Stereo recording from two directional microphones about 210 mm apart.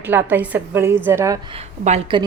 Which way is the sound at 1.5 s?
30° right (ahead or behind).